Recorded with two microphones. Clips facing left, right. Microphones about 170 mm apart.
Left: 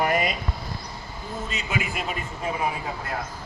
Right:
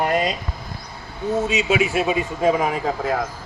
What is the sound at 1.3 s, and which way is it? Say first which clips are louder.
A man's voice: right 13 dB; 85° right.